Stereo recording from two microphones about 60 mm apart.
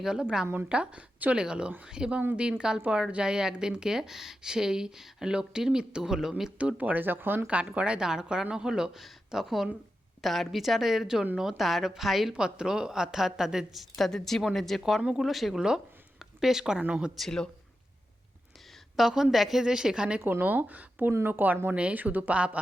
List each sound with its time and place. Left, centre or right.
0.0 s a woman's voice: centre
6.6 s speech: right
7.4 s a woman's voice: centre
12.3 s a woman's voice: centre
13.9 s a woman's voice: centre
17.2 s speech: centre
18.9 s a woman's voice: centre
20.4 s speech: right